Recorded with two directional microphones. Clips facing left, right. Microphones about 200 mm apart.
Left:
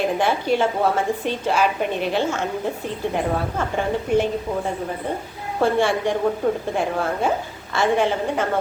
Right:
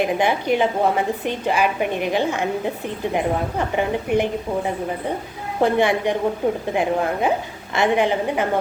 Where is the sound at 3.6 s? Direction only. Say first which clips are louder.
Right 1 dB; 15° right (ahead or behind).